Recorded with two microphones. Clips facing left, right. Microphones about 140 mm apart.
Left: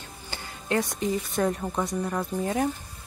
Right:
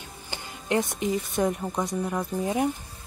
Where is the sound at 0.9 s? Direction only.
15° right (ahead or behind).